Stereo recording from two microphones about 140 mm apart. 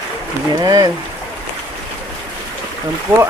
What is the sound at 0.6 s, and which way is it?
Speech, 25° right (ahead or behind).